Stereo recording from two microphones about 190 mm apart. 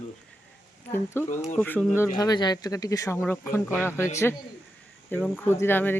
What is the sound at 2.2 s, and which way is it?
Speech, 20° left (ahead or behind).